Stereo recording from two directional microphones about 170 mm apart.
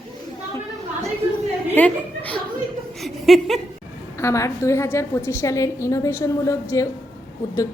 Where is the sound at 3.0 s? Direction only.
Centre (ahead or behind).